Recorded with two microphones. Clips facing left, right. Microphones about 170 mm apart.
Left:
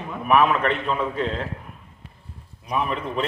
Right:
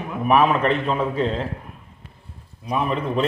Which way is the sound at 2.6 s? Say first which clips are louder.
Right 3 dB; 35° right (ahead or behind).